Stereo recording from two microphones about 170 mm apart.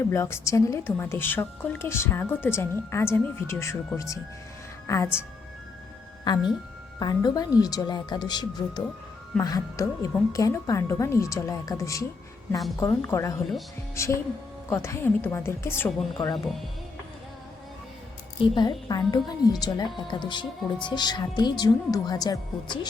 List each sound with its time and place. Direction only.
0.1 s a woman's voice: 15° left (ahead or behind)
6.3 s a woman's voice: 25° left (ahead or behind)
16.1 s a woman's voice: 25° left (ahead or behind)
18.5 s a woman's voice: 25° left (ahead or behind)